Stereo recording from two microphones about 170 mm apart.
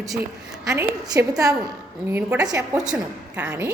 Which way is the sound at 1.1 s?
20° right (ahead or behind).